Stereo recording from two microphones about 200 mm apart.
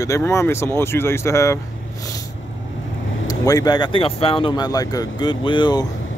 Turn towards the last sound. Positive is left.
turn(degrees=20)  # may be behind; listen again after turning